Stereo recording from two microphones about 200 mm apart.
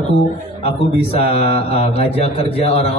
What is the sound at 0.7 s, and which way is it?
A man's voice, 30° left (ahead or behind).